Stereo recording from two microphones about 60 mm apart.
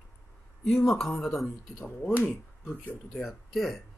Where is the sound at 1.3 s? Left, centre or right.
Left.